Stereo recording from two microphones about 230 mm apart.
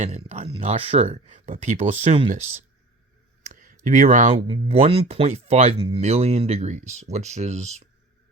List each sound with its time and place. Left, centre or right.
0.0 s speech: right
3.4 s clicking: right
3.8 s speech: right